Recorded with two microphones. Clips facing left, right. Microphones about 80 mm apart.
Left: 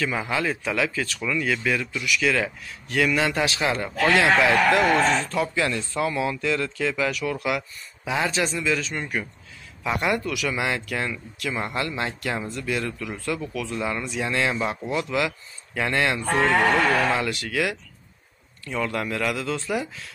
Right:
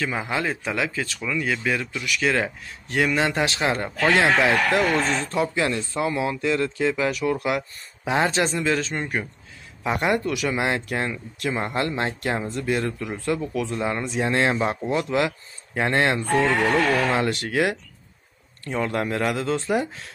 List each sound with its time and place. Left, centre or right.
0.0 s speech: right
9.0 s speech: right
16.3 s speech: left
17.1 s speech: right